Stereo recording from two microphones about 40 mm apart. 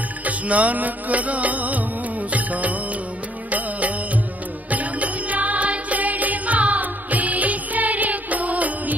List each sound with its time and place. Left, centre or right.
0.2 s music: right
4.6 s music: right